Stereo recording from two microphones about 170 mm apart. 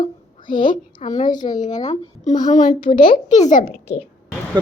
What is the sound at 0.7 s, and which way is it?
A woman's voice, 45° left (ahead or behind).